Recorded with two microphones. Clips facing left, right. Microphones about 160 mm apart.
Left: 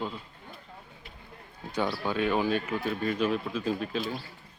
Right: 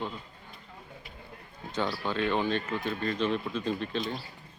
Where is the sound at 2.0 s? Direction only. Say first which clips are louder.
Left 2 dB; 10° left (ahead or behind).